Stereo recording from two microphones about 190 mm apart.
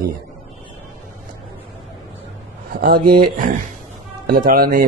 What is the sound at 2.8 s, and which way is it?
Speech, 50° right (ahead or behind).